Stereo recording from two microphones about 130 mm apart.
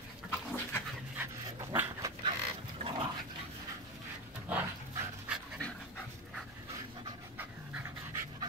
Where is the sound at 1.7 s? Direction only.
15° right (ahead or behind).